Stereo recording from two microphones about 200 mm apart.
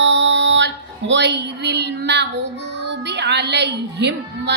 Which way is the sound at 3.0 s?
60° right (ahead or behind).